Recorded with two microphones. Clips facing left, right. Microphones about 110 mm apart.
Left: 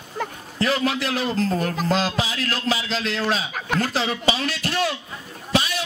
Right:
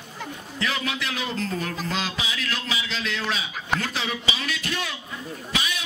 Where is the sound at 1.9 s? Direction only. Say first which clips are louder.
Left 7 dB; 40° left (ahead or behind).